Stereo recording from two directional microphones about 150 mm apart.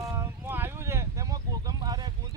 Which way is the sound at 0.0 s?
20° right (ahead or behind).